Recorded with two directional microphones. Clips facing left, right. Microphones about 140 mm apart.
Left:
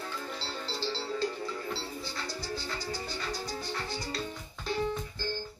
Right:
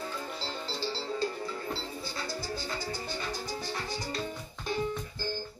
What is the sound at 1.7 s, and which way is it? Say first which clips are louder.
Music: even; 50° right (ahead or behind).